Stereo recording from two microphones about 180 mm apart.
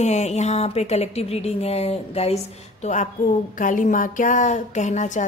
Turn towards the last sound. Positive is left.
turn(degrees=40)  # may be behind; listen again after turning